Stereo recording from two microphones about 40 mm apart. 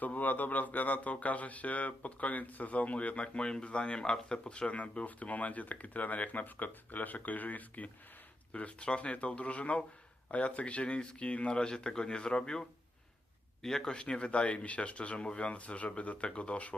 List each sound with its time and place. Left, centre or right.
0.0 s speech: left
3.3 s speech: left
8.5 s a man's voice: left; by 13.9 s centre
13.9 s speech: left